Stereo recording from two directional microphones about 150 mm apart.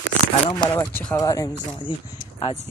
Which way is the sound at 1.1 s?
25° left (ahead or behind).